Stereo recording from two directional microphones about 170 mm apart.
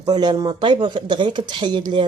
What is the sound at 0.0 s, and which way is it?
Speech, 25° right (ahead or behind).